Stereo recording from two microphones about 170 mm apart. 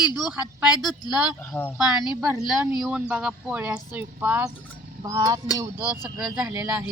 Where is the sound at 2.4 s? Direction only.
5° right (ahead or behind).